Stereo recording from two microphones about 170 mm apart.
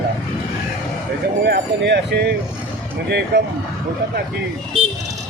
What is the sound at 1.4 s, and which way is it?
Speech, 75° right (ahead or behind).